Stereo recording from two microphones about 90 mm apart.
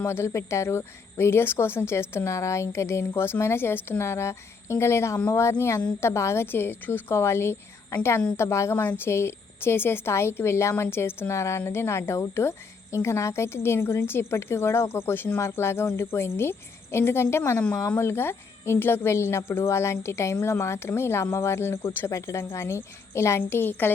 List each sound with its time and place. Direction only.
0.0 s a woman's voice: 30° left (ahead or behind)